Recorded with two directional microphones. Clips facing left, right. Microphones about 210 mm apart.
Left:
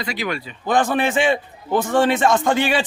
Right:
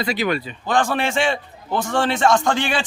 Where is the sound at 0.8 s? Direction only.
15° left (ahead or behind).